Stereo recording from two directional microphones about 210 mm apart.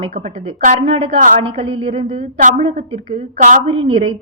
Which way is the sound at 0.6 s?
30° right (ahead or behind).